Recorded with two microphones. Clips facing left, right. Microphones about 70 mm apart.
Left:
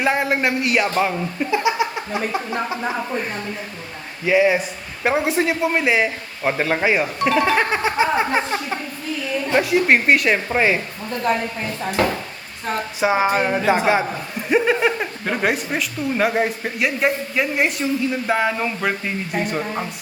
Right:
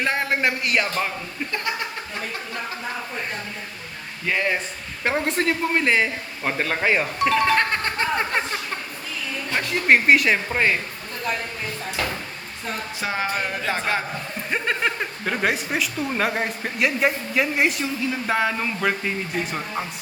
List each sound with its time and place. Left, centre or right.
0.0 s a woman's voice: centre
4.3 s a woman's voice: centre
9.6 s a woman's voice: centre
13.0 s a sound: centre
13.6 s a woman's voice: centre